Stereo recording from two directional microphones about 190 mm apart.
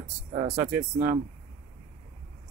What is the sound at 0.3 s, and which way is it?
Speech, 25° right (ahead or behind).